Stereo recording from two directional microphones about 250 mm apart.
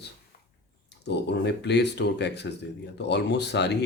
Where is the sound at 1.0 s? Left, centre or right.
Left.